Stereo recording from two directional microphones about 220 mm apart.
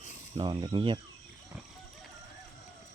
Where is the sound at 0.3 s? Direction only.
20° right (ahead or behind).